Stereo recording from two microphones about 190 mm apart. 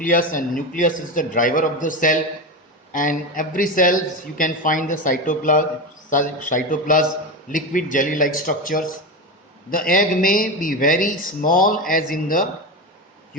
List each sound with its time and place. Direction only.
0.0 s a man's voice: 45° left (ahead or behind)